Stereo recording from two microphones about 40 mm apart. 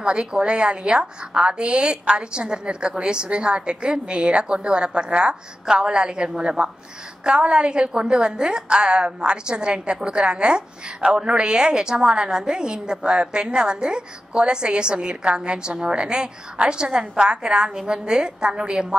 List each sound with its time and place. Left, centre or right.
0.0 s a woman's voice: right